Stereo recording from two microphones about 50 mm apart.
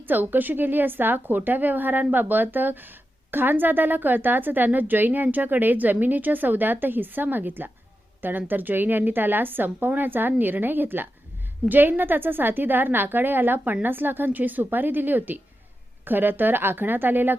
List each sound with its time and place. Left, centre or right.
0.0 s a woman's voice: right